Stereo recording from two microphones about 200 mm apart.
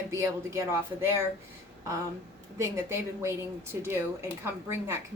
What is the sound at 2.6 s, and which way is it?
A woman's voice, 15° right (ahead or behind).